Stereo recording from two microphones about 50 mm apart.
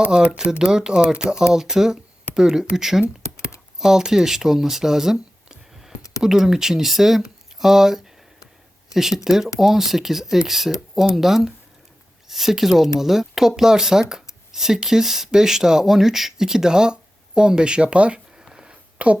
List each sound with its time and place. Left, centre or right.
0.0 s speech: centre
3.2 s computer keyboard: left
3.8 s speech: centre
18.5 s a sound: centre
18.9 s speech: right